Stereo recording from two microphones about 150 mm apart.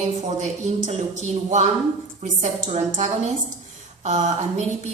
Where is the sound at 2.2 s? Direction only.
50° right (ahead or behind).